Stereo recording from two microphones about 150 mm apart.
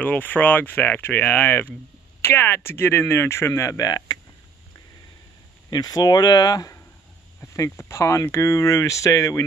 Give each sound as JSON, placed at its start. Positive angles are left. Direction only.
{"t": 0.0, "sound": "speech", "side_deg": 10}
{"t": 5.7, "sound": "speech", "side_deg": 25}